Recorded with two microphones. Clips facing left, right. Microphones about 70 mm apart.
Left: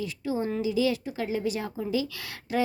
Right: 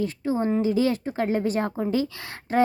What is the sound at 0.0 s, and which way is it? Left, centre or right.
A woman's voice, right.